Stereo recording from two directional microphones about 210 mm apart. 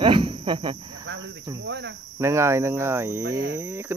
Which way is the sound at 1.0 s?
60° right (ahead or behind).